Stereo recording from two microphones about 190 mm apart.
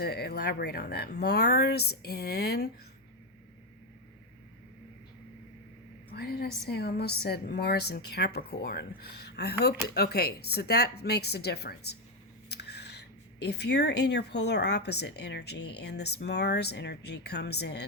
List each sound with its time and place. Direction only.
0.0 s speech: 55° left (ahead or behind)
6.1 s speech: 55° left (ahead or behind)